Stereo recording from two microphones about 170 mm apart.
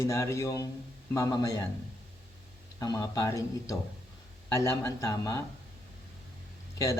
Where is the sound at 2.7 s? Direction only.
20° left (ahead or behind).